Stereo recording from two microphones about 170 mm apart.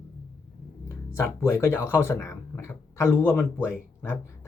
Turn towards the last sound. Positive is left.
turn(degrees=15)  # may be behind; listen again after turning